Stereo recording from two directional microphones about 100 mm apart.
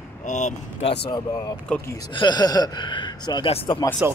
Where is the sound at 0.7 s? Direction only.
70° left (ahead or behind).